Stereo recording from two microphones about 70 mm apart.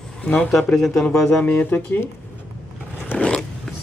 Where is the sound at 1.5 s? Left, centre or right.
Left.